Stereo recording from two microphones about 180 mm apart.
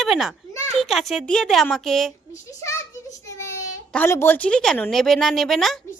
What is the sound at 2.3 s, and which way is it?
Speech, 15° left (ahead or behind).